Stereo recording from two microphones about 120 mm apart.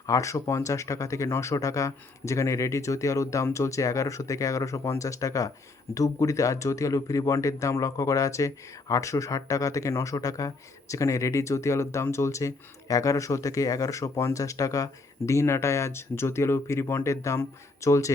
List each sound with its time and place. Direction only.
0.0 s speech: 25° left (ahead or behind)